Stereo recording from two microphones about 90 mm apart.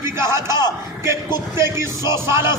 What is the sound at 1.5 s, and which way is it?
A man's voice, 30° right (ahead or behind).